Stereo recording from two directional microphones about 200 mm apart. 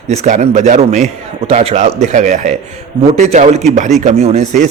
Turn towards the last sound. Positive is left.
turn(degrees=-30)  # may be behind; listen again after turning